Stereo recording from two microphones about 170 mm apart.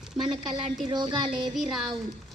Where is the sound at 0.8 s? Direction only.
25° right (ahead or behind).